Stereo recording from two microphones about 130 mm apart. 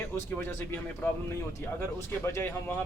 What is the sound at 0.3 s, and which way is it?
A man's voice, 15° left (ahead or behind).